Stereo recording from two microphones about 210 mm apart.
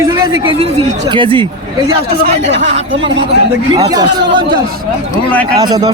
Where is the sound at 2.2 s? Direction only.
50° right (ahead or behind).